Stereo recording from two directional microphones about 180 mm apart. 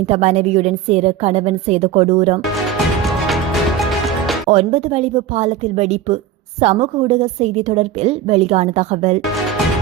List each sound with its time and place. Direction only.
0.0 s a woman's voice: 35° right (ahead or behind)
3.8 s music: centre (ahead or behind)
4.5 s a woman's voice: 35° right (ahead or behind)